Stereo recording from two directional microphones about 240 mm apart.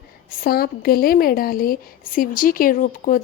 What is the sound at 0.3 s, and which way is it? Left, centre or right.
A woman's voice, left.